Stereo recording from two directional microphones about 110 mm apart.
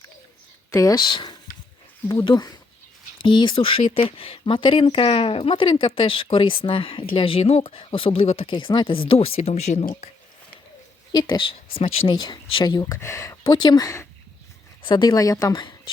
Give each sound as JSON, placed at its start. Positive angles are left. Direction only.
{"t": 0.7, "sound": "speech", "side_deg": 30}
{"t": 5.6, "sound": "a woman's voice", "side_deg": 45}
{"t": 11.1, "sound": "speech", "side_deg": 40}
{"t": 14.8, "sound": "speech", "side_deg": 40}